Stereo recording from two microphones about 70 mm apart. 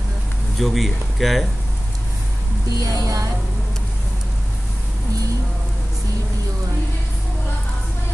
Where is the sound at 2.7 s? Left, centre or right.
Right.